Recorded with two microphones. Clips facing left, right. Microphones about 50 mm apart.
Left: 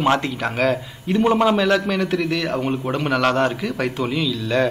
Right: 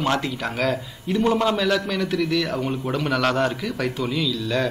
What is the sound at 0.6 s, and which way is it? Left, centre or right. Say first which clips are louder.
Speech: left 4 dB; centre.